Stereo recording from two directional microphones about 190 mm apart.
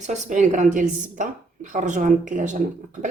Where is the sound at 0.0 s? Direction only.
40° right (ahead or behind).